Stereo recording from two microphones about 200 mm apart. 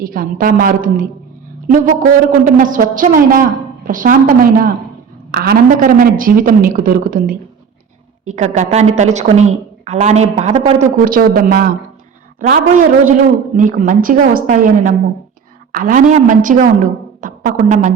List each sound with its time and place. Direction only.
0.0 s a woman's voice: 45° right (ahead or behind)